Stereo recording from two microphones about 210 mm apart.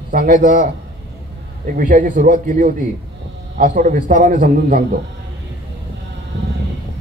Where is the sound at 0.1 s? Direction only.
40° right (ahead or behind).